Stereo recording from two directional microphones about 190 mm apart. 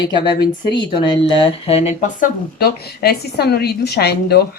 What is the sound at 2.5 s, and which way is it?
A woman's voice, 55° left (ahead or behind).